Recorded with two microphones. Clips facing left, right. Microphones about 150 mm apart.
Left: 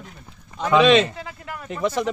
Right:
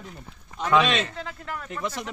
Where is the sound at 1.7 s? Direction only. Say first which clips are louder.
Left 10 dB; 80° left.